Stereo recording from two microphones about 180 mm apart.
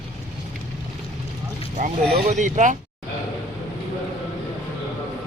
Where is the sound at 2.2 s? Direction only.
45° right (ahead or behind).